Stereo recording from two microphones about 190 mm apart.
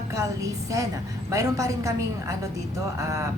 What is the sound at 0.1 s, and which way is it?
A woman's voice, 15° right (ahead or behind).